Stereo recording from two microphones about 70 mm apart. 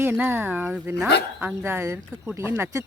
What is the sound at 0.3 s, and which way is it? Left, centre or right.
Speech, right.